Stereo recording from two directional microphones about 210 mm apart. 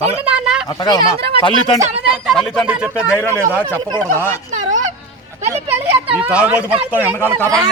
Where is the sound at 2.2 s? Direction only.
Centre (ahead or behind).